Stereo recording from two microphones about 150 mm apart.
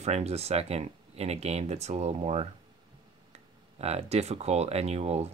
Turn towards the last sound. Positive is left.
turn(degrees=-45)  # may be behind; listen again after turning